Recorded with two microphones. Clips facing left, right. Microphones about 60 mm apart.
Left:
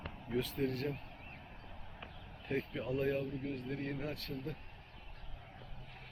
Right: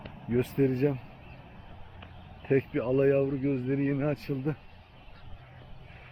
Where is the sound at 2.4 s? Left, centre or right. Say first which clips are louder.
Right 12 dB; right.